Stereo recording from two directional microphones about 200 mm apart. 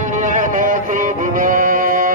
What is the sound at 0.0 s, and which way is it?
Music, 40° right (ahead or behind).